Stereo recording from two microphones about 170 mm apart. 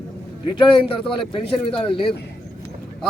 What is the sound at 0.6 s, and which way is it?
A man's voice, 30° left (ahead or behind).